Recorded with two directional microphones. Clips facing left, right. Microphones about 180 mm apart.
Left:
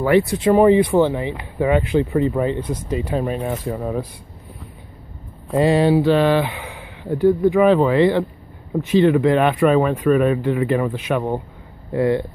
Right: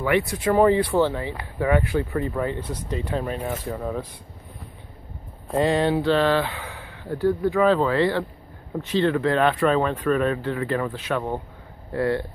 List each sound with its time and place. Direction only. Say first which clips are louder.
0.0 s speech: left 6 dB; 30° left (ahead or behind); by 4.1 s 15° left (ahead or behind)
5.6 s speech: left 5 dB; 10° left (ahead or behind)